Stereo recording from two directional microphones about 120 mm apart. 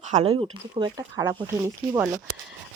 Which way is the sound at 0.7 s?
35° right (ahead or behind).